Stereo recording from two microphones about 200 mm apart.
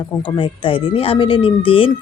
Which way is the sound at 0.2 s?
25° left (ahead or behind).